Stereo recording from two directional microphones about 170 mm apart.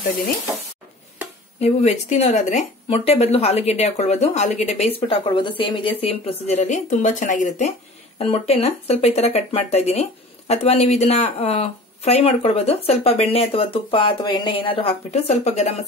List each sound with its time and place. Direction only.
1.6 s speech: 40° left (ahead or behind)
5.0 s speech: 30° left (ahead or behind)